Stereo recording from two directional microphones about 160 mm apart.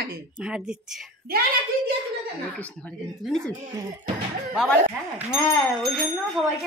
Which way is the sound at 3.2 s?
Centre (ahead or behind).